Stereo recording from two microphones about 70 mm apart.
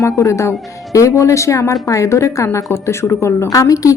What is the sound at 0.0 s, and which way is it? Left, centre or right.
A woman's voice, left.